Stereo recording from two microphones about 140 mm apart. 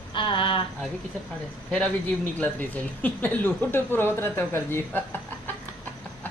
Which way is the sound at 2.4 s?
15° left (ahead or behind).